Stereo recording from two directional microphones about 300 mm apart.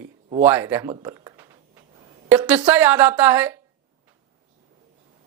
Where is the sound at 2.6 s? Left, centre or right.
Centre.